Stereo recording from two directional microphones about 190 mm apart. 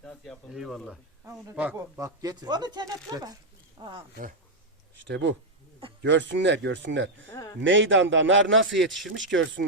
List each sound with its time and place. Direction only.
0.0 s speech: centre (ahead or behind)
1.5 s speech: 10° right (ahead or behind)
5.0 s speech: 75° right (ahead or behind)